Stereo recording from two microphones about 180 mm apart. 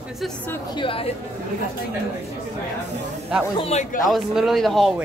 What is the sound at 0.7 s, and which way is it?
Speech, 30° left (ahead or behind).